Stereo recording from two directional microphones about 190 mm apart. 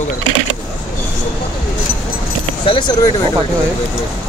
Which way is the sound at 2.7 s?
25° left (ahead or behind).